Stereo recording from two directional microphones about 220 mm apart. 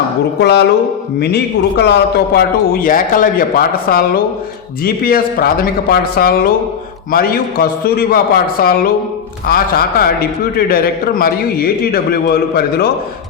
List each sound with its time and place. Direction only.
0.3 s a man's voice: 50° left (ahead or behind)